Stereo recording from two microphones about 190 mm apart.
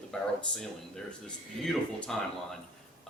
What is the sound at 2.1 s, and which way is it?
Speech, 5° left (ahead or behind).